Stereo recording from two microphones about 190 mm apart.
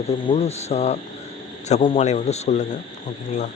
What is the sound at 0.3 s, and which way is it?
Speech, 35° left (ahead or behind).